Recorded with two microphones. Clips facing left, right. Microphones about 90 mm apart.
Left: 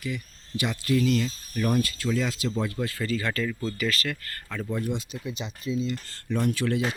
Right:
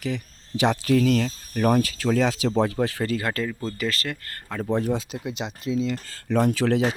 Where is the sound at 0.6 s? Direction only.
90° right.